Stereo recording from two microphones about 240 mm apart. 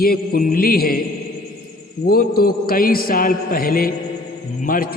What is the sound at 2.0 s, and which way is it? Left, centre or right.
A man's voice, left.